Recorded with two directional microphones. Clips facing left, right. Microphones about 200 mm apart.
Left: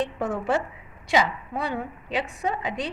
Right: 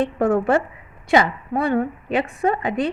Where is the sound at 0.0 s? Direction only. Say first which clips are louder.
Right 8 dB; 60° right (ahead or behind).